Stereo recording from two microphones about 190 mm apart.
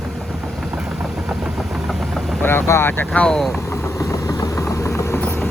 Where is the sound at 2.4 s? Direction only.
10° left (ahead or behind).